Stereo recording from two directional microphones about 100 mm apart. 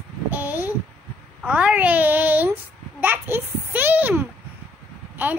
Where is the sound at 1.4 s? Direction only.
15° right (ahead or behind).